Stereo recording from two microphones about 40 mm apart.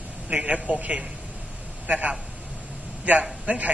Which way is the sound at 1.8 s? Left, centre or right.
Right.